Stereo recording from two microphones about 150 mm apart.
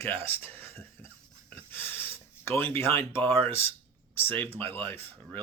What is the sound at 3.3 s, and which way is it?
Speech, 15° left (ahead or behind).